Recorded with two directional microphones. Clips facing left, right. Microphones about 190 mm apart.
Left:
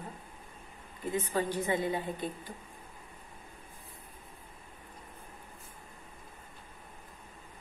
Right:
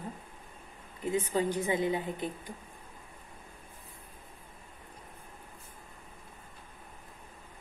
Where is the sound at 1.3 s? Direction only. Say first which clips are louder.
Even; 20° right (ahead or behind).